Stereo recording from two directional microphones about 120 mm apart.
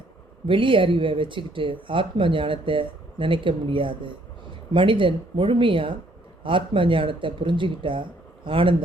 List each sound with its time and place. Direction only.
0.4 s speech: 45° right (ahead or behind)